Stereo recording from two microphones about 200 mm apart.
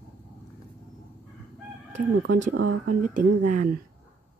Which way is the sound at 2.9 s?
45° right (ahead or behind).